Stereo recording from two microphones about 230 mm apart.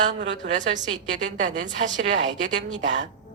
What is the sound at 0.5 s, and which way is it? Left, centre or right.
A woman's voice, right.